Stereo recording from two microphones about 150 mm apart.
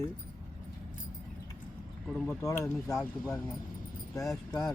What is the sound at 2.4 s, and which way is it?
Speech, 20° left (ahead or behind).